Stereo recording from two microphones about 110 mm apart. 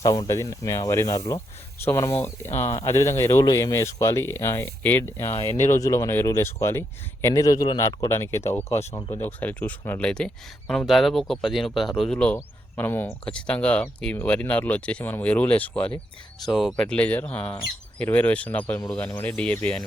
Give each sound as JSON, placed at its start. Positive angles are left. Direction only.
{"t": 0.0, "sound": "speech", "side_deg": 35}
{"t": 1.8, "sound": "speech", "side_deg": 25}
{"t": 8.1, "sound": "speech", "side_deg": 25}
{"t": 9.0, "sound": "speech", "side_deg": 35}
{"t": 9.2, "sound": "speech", "side_deg": 15}